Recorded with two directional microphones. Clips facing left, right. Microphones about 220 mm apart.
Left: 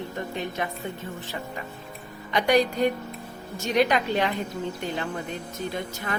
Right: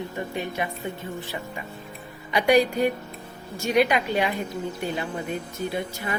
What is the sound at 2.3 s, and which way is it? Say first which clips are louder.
Speech: right 2 dB; 10° right (ahead or behind).